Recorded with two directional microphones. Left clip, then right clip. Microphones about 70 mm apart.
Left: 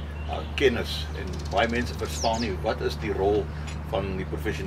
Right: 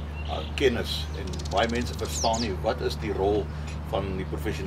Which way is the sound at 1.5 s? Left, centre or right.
Right.